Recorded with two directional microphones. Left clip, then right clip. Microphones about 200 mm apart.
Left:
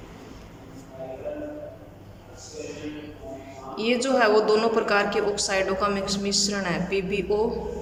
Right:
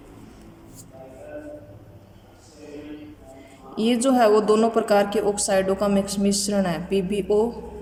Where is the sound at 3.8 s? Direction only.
30° right (ahead or behind).